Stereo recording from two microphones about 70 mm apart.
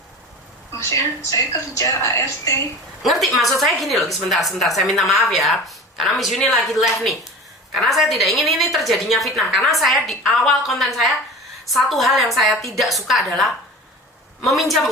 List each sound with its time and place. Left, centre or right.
0.7 s a woman's voice: left
3.0 s a woman's voice: centre